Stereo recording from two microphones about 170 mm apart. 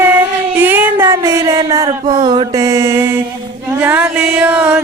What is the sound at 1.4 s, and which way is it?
Mantra, 20° right (ahead or behind).